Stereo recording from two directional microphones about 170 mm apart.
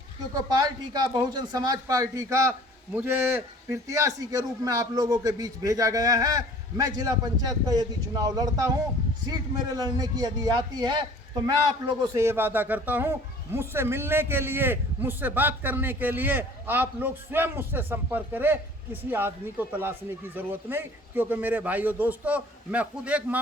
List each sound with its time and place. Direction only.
0.3 s speech: 25° right (ahead or behind); by 23.4 s 10° right (ahead or behind)